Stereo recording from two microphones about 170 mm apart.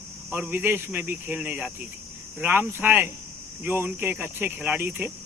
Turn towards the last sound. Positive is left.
turn(degrees=-10)  # may be behind; listen again after turning